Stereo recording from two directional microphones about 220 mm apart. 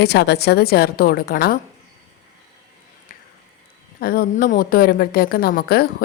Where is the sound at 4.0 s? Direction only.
40° left (ahead or behind).